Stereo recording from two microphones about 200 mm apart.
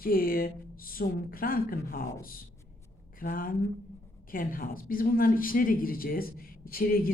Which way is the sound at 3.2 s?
45° left (ahead or behind).